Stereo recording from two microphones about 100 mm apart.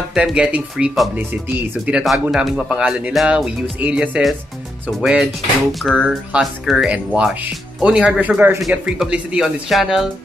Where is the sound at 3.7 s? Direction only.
15° right (ahead or behind).